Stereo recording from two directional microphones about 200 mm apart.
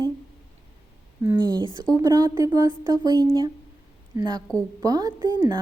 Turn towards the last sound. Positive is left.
turn(degrees=-20)  # may be behind; listen again after turning